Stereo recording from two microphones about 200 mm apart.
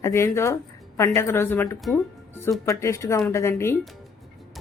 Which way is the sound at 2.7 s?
15° left (ahead or behind).